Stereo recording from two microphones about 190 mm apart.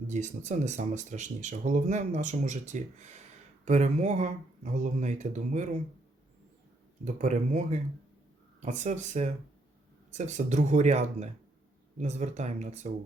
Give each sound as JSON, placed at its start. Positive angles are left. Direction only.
{"t": 0.1, "sound": "speech", "side_deg": -40}
{"t": 7.0, "sound": "speech", "side_deg": -40}